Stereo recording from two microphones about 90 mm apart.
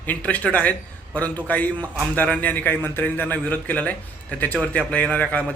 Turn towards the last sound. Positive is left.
turn(degrees=15)  # may be behind; listen again after turning